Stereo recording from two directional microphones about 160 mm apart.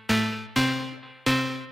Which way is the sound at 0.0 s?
Centre (ahead or behind).